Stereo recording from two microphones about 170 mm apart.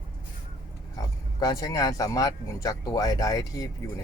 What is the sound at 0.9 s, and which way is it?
Speech, 20° left (ahead or behind).